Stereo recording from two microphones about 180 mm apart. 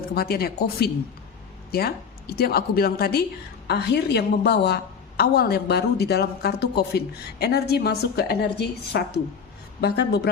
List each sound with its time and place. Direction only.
0.1 s a woman's voice: 60° left (ahead or behind)